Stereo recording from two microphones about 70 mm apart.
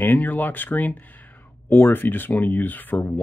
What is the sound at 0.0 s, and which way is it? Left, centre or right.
Speech, left.